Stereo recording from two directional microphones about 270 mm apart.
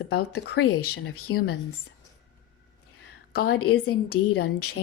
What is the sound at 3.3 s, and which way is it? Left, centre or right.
Speech, left.